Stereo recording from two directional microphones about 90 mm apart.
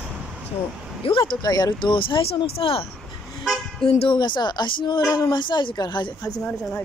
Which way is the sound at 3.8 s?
80° left.